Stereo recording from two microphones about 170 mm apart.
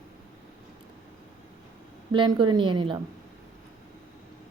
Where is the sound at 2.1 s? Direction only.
30° right (ahead or behind).